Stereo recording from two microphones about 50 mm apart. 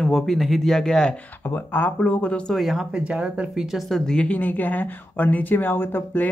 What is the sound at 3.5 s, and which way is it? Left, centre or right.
Speech, centre.